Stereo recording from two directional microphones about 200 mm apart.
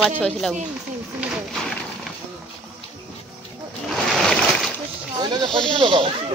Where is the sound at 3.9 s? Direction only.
Centre (ahead or behind).